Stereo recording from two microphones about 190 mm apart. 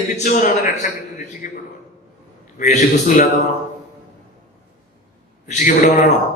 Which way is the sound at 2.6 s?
40° left (ahead or behind).